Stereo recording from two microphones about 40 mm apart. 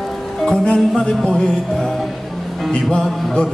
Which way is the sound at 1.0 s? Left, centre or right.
Centre.